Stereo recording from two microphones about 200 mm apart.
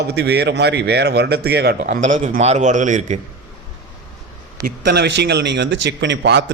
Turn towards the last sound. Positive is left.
turn(degrees=-60)  # may be behind; listen again after turning